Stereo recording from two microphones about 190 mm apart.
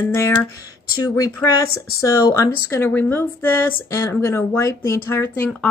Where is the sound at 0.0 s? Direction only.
15° left (ahead or behind).